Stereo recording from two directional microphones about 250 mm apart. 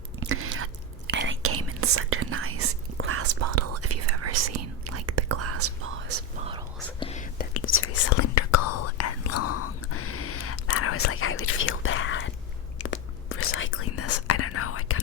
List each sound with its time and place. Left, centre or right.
0.2 s chewing: right
1.0 s whispering: right
7.0 s whispering: left
7.5 s whispering: left
8.2 s whispering: left